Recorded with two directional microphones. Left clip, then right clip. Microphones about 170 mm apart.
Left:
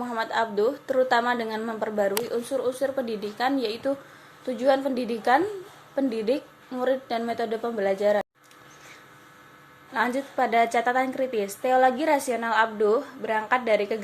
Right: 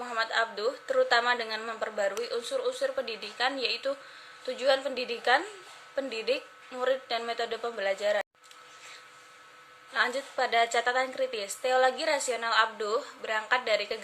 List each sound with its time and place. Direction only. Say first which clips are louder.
0.2 s a woman's voice: left 4 dB; 15° right (ahead or behind)
6.2 s a woman's voice: left 4 dB; 20° right (ahead or behind)
9.9 s a woman's voice: left 3 dB; 20° right (ahead or behind)